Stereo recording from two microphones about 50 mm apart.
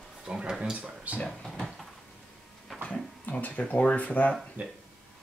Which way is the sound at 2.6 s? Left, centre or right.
Centre.